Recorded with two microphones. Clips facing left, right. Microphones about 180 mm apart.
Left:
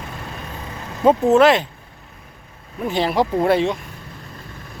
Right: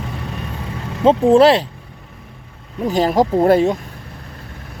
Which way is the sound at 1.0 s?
30° right (ahead or behind).